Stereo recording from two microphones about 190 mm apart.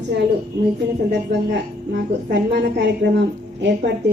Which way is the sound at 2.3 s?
65° right (ahead or behind).